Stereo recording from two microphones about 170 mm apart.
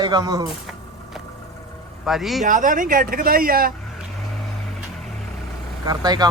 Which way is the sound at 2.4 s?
50° right (ahead or behind).